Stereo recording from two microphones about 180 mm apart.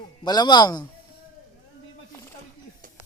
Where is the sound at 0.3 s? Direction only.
25° left (ahead or behind).